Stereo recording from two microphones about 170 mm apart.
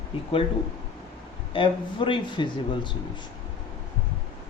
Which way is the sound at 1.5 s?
30° left (ahead or behind).